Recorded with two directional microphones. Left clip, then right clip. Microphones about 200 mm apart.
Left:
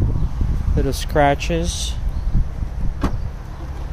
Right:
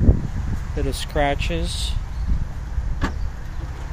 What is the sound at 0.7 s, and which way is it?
Speech, 20° left (ahead or behind).